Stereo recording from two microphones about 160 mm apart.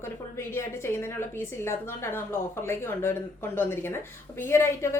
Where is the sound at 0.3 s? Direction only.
15° left (ahead or behind).